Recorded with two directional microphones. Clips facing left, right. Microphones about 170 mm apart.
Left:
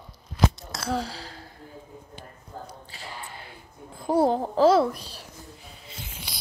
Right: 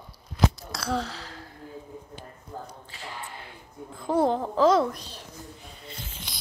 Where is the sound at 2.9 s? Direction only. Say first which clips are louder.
Right 2 dB; 35° left (ahead or behind).